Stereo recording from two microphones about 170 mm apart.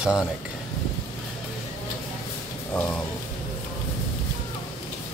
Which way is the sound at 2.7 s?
10° left (ahead or behind).